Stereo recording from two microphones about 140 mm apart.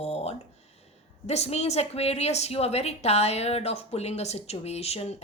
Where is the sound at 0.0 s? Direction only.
50° left (ahead or behind).